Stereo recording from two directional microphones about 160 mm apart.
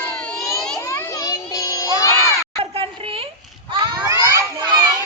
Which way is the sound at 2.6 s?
35° right (ahead or behind).